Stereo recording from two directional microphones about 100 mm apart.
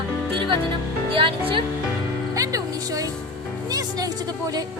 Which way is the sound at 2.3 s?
35° right (ahead or behind).